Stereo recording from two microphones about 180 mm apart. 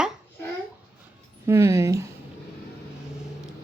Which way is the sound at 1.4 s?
15° right (ahead or behind).